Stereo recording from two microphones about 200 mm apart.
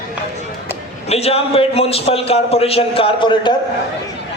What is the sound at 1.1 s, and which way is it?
A man's voice, 30° left (ahead or behind).